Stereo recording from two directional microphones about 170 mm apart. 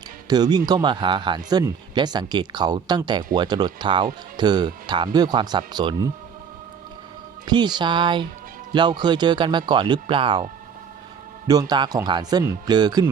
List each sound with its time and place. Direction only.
0.3 s speech: 25° right (ahead or behind)
7.4 s speech: 25° right (ahead or behind)
11.7 s speech: 25° right (ahead or behind)